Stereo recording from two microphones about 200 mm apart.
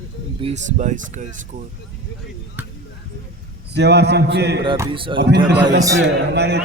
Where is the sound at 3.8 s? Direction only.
60° right (ahead or behind).